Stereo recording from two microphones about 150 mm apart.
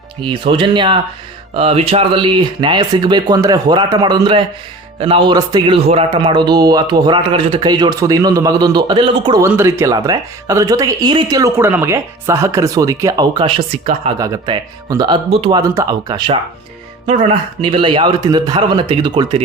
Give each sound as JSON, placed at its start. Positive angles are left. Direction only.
{"t": 0.2, "sound": "speech", "side_deg": -35}
{"t": 9.4, "sound": "speech", "side_deg": -15}
{"t": 15.3, "sound": "speech", "side_deg": -40}
{"t": 15.7, "sound": "speech", "side_deg": -25}
{"t": 17.7, "sound": "speech", "side_deg": -35}